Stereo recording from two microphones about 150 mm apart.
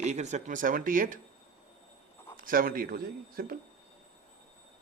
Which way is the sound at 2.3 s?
70° right (ahead or behind).